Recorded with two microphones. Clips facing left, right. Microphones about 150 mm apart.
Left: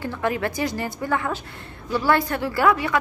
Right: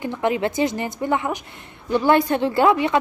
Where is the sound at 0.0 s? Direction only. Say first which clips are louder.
Right 3 dB; 20° right (ahead or behind).